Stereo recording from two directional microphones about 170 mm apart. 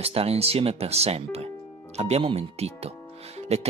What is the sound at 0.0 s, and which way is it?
Speech, 35° right (ahead or behind).